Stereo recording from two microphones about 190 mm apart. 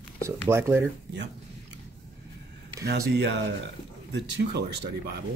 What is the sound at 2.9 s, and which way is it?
Speech, 65° right (ahead or behind).